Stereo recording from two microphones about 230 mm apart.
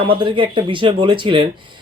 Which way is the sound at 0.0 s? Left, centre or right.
Right.